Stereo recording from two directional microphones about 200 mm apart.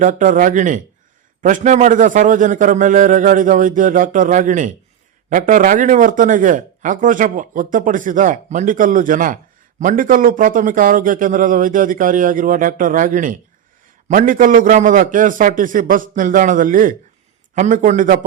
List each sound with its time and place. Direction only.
0.0 s speech: 40° right (ahead or behind)